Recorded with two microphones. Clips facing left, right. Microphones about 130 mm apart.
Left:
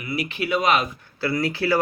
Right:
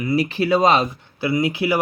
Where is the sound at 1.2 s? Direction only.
20° right (ahead or behind).